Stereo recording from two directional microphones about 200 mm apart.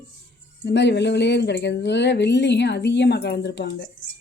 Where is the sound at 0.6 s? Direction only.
60° left (ahead or behind).